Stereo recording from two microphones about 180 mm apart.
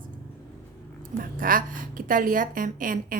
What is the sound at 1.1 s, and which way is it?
Speech, 50° right (ahead or behind).